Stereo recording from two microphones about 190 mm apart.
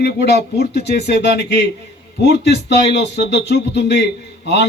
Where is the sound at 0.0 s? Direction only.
60° left (ahead or behind).